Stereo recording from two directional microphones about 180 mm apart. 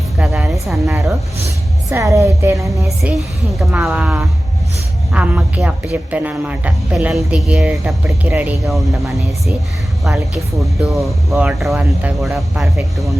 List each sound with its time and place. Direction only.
0.2 s music: 5° right (ahead or behind)
1.9 s speech: 15° right (ahead or behind); by 13.1 s centre (ahead or behind)